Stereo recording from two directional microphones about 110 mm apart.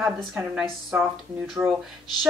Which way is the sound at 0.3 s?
10° right (ahead or behind).